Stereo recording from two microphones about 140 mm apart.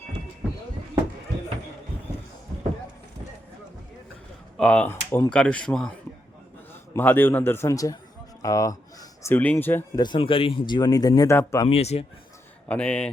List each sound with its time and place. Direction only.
4.5 s speech: 10° left (ahead or behind)
6.9 s a man's voice: 15° left (ahead or behind)
8.4 s a sound: 25° left (ahead or behind)
9.3 s a man's voice: 15° left (ahead or behind)
10.0 s speech: 35° left (ahead or behind)
11.7 s speech: 45° left (ahead or behind)
12.6 s a man's voice: 10° left (ahead or behind)